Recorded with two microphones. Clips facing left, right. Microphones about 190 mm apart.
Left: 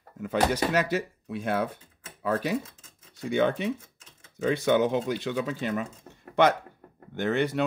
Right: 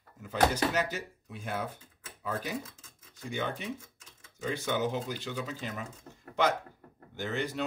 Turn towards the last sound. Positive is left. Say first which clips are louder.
# left 8 dB
turn(degrees=65)  # may be behind; listen again after turning